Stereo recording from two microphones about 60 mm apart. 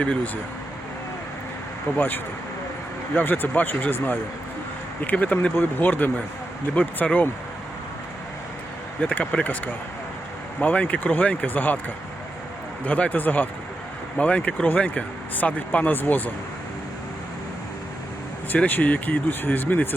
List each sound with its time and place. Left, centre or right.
2.0 s speech: left
5.5 s speech: left
9.0 s speech: centre
10.6 s speech: left
12.8 s speech: left
18.5 s speech: left